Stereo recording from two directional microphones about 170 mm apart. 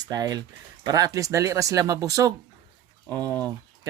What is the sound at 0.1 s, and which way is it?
Speech, 20° right (ahead or behind).